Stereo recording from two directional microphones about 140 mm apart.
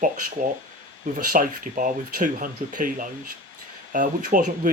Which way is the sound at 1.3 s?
70° right (ahead or behind).